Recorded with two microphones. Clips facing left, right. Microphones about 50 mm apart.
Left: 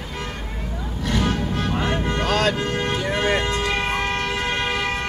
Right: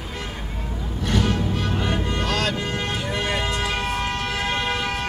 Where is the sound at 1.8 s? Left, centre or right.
Centre.